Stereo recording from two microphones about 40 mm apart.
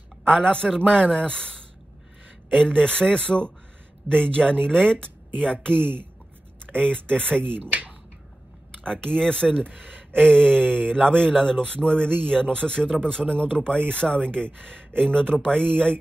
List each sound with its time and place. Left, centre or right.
0.3 s speech: centre
8.8 s speech: centre
10.5 s mantra: right
11.1 s speech: left